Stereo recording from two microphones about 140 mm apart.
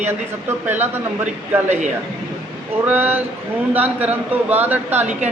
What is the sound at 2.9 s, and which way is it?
Speech, 15° right (ahead or behind).